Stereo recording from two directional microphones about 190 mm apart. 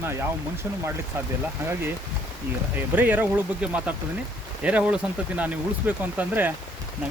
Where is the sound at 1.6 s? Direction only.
15° right (ahead or behind).